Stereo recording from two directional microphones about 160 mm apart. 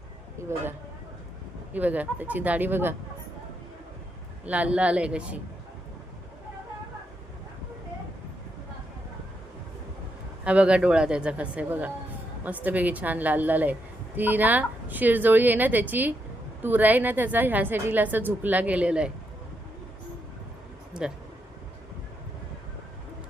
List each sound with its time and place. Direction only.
0.4 s a woman's voice: 15° right (ahead or behind)
1.7 s a woman's voice: 10° right (ahead or behind)
4.4 s a woman's voice: 10° right (ahead or behind)
10.4 s a woman's voice: 10° right (ahead or behind)
20.9 s speech: 5° right (ahead or behind)